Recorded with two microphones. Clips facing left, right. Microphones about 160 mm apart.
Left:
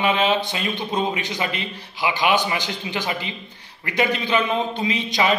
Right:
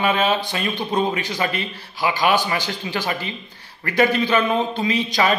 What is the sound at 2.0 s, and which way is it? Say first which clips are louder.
Speech: right 2 dB; 45° right (ahead or behind).